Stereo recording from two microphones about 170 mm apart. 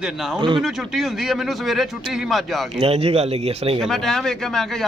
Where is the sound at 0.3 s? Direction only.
30° right (ahead or behind).